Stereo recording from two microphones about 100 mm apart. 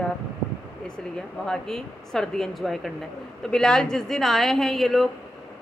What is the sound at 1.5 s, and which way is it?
A woman's voice, 5° left (ahead or behind).